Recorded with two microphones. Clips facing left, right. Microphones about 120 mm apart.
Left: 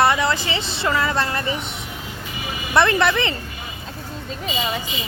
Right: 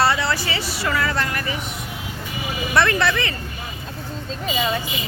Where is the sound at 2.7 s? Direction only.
20° left (ahead or behind).